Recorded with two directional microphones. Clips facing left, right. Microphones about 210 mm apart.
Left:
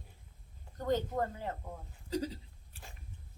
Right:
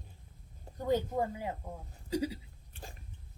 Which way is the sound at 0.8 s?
10° right (ahead or behind).